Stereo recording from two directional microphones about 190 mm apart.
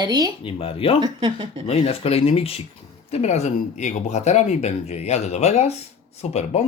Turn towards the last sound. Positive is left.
turn(degrees=35)  # may be behind; listen again after turning